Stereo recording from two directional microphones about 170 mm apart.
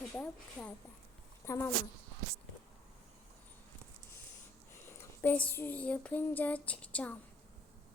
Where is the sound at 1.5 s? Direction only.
15° left (ahead or behind).